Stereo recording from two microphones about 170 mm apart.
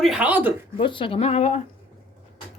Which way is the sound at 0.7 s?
30° left (ahead or behind).